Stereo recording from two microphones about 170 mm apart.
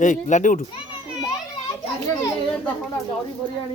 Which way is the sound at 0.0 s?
45° left (ahead or behind).